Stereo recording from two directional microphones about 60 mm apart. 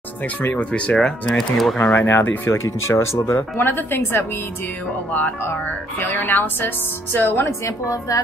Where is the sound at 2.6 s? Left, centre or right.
Left.